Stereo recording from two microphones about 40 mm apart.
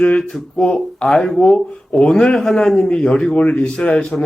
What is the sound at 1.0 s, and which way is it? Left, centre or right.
Speech, centre.